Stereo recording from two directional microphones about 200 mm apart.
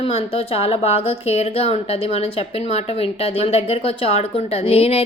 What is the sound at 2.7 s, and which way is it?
A woman's voice, 30° left (ahead or behind).